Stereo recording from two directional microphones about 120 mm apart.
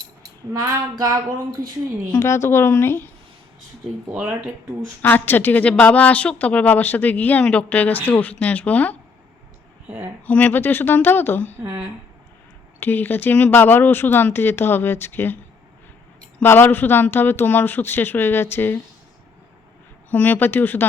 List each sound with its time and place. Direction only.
0.9 s a sound: 25° right (ahead or behind)
2.1 s a woman's voice: 20° left (ahead or behind)
4.1 s speech: 15° right (ahead or behind)
5.0 s a woman's voice: 15° left (ahead or behind)
10.2 s a woman's voice: 10° left (ahead or behind)
11.5 s speech: 15° right (ahead or behind)
12.8 s a woman's voice: 15° left (ahead or behind)
16.4 s a woman's voice: 15° left (ahead or behind)
20.1 s a woman's voice: 15° left (ahead or behind)